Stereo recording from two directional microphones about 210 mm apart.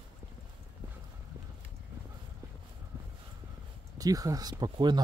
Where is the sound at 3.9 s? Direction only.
15° right (ahead or behind).